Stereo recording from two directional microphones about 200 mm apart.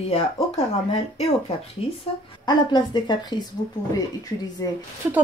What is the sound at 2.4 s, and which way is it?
Speech, 20° left (ahead or behind).